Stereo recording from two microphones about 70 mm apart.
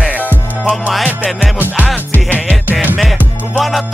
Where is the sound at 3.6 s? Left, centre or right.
Centre.